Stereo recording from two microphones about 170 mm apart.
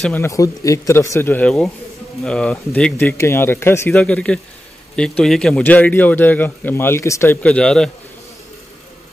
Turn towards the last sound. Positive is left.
turn(degrees=5)  # may be behind; listen again after turning